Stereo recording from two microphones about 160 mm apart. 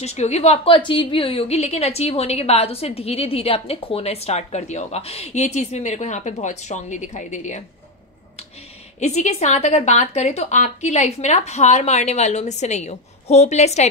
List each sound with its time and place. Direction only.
0.0 s a woman's voice: 40° left (ahead or behind)
9.0 s a woman's voice: 45° left (ahead or behind)